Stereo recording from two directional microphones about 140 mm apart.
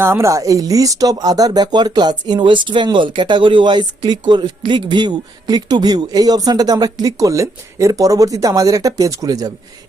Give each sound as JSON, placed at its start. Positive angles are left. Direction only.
{"t": 0.0, "sound": "speech", "side_deg": -20}